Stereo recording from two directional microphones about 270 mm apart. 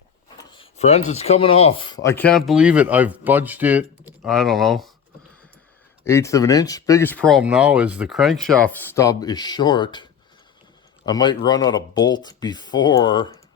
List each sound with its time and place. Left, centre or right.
0.3 s speech: centre
6.1 s speech: centre